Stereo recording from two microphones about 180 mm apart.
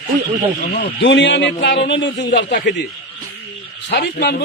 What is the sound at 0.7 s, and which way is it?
A man's voice, 70° left (ahead or behind).